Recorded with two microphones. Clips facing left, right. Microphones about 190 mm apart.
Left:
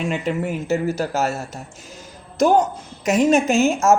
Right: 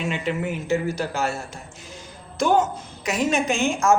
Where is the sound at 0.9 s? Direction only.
40° left (ahead or behind).